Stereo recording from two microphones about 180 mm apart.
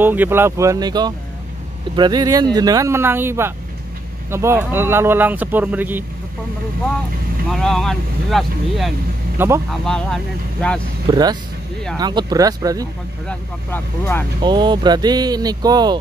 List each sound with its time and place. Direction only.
0.0 s speech: 10° right (ahead or behind)
7.5 s speech: centre (ahead or behind)
9.4 s speech: 10° right (ahead or behind)
9.8 s speech: centre (ahead or behind)
11.1 s speech: 20° right (ahead or behind)
13.3 s speech: 10° left (ahead or behind)
14.4 s speech: 25° right (ahead or behind)